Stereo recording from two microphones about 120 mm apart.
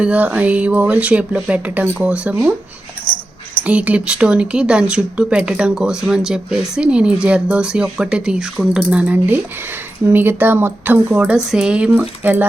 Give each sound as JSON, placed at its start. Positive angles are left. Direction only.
{"t": 0.0, "sound": "speech", "side_deg": -10}